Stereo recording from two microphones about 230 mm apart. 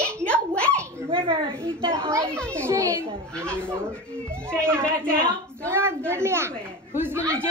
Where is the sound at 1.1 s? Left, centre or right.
Right.